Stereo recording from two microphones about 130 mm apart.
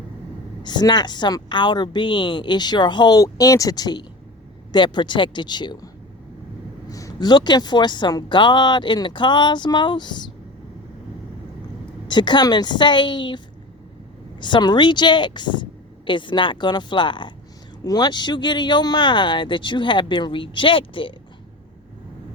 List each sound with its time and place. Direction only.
0.6 s speech: 35° left (ahead or behind)
6.9 s speech: 30° left (ahead or behind)
12.0 s speech: 35° left (ahead or behind)
14.4 s speech: 35° left (ahead or behind)